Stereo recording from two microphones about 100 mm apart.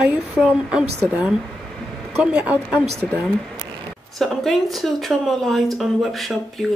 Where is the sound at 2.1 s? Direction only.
15° right (ahead or behind).